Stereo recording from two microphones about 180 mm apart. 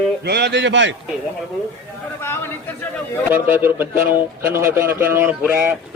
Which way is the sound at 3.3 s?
10° right (ahead or behind).